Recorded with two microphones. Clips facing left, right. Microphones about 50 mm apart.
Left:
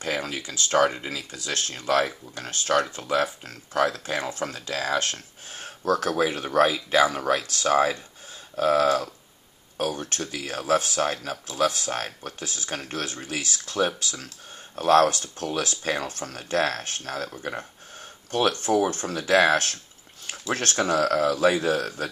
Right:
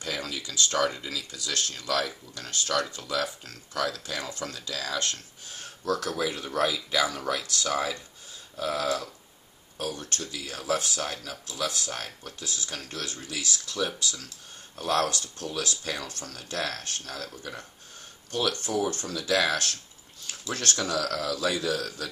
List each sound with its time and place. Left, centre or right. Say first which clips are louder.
0.0 s speech: left 5 dB; left